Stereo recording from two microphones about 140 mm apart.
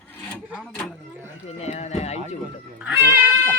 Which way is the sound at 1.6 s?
50° left (ahead or behind).